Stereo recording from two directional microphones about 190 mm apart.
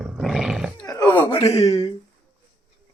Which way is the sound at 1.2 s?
30° left (ahead or behind).